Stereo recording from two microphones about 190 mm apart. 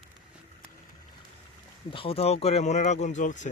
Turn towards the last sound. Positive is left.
turn(degrees=40)  # may be behind; listen again after turning